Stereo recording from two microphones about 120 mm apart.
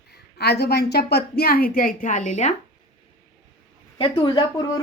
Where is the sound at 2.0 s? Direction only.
90° left.